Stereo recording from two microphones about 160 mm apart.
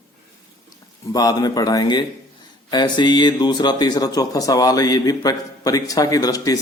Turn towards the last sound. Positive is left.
turn(degrees=20)  # may be behind; listen again after turning